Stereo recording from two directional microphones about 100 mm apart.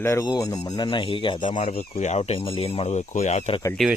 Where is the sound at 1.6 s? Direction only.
90° left; by 2.9 s 75° left (ahead or behind).